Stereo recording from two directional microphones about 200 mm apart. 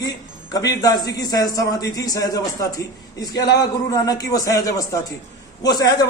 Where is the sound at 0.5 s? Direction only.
20° left (ahead or behind).